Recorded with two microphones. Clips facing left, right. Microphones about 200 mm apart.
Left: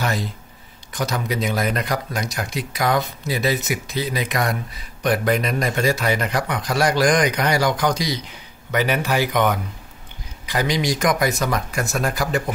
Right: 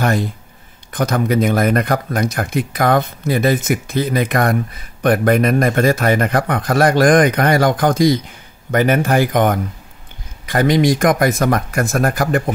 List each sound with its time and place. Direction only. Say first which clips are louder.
0.0 s speech: right 7 dB; 50° right (ahead or behind)